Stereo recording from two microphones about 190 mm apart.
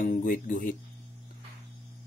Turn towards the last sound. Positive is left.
turn(degrees=45)  # may be behind; listen again after turning